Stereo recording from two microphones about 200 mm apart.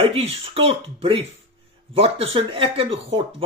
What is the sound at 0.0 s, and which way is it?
Speech, 30° right (ahead or behind).